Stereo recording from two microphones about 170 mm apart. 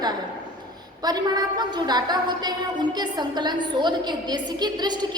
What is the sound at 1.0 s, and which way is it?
A woman's voice, 25° right (ahead or behind).